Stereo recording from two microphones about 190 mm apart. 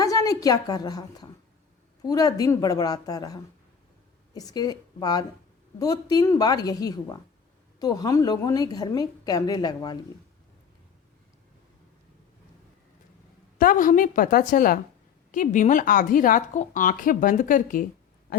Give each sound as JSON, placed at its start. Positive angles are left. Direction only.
{"t": 0.0, "sound": "a woman's voice", "side_deg": 20}
{"t": 13.6, "sound": "a woman's voice", "side_deg": 45}